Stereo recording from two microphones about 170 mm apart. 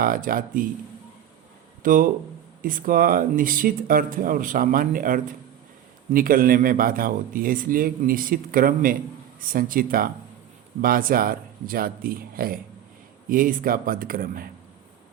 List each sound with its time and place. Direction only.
0.0 s a man's voice: 55° right (ahead or behind)
1.8 s a man's voice: 55° right (ahead or behind)